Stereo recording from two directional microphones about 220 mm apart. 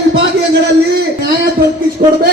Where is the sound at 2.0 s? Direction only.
35° right (ahead or behind).